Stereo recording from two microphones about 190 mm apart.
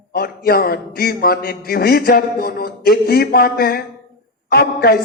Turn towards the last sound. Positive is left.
turn(degrees=55)  # may be behind; listen again after turning